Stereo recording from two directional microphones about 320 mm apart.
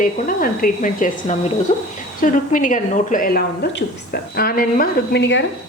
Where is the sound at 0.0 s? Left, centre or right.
Left.